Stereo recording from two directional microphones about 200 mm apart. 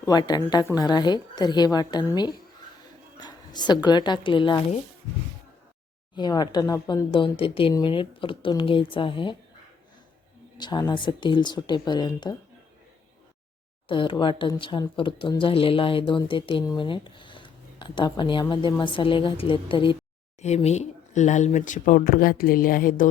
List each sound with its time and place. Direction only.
0.0 s speech: 20° left (ahead or behind)
6.1 s speech: 20° left (ahead or behind)
10.6 s speech: 20° left (ahead or behind)
13.8 s speech: 25° left (ahead or behind); by 23.0 s 45° left (ahead or behind)